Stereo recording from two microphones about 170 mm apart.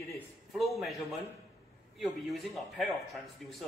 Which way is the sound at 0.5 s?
Centre (ahead or behind).